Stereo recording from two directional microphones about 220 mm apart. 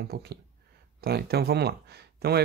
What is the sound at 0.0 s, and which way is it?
Speech, 45° right (ahead or behind).